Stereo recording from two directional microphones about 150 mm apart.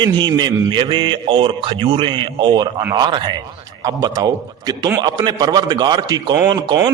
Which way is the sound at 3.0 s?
30° right (ahead or behind).